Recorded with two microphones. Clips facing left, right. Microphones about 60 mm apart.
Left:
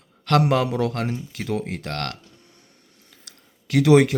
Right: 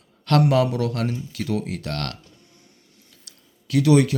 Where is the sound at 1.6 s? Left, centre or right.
Left.